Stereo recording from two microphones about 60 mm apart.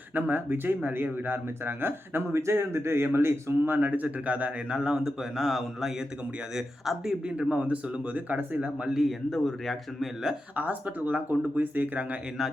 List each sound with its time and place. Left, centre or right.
0.1 s speech: right; by 4.9 s centre
5.0 s a man's voice: centre; by 8.7 s right
8.8 s a man's voice: centre
10.5 s speech: right